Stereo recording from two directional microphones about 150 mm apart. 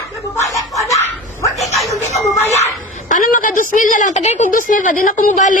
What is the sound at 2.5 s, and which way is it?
A woman's voice, 50° left (ahead or behind).